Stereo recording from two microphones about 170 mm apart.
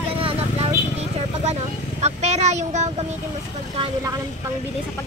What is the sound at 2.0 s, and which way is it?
Speech, 40° right (ahead or behind).